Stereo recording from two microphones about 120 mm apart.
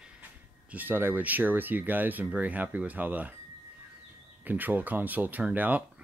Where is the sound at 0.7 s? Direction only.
15° right (ahead or behind).